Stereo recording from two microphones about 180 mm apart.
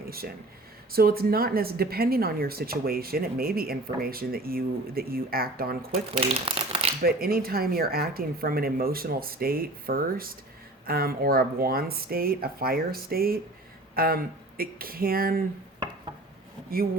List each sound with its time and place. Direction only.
0.9 s speech: 55° right (ahead or behind)
6.1 s speech: 30° right (ahead or behind)
7.0 s speech: 55° right (ahead or behind)
16.6 s speech: 55° right (ahead or behind)